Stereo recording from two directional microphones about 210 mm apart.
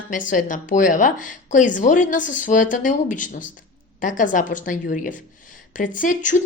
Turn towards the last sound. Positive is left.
turn(degrees=40)  # may be behind; listen again after turning